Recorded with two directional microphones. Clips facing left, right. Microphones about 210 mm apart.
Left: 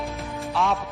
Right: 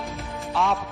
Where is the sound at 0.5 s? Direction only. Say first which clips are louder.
Even; centre (ahead or behind).